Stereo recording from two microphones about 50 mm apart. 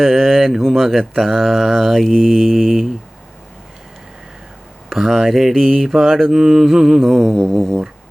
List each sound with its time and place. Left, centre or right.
0.0 s mantra: centre
4.9 s mantra: centre